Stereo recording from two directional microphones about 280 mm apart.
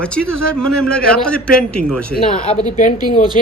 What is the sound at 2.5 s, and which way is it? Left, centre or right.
Speech, left.